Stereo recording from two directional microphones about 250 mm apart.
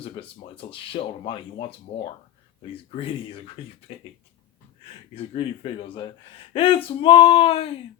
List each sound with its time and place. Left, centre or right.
0.5 s speech: left
2.9 s speech: left
5.1 s speech: left
6.5 s speech: left